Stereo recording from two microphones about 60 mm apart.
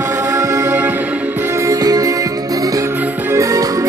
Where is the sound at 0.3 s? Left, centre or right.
Right.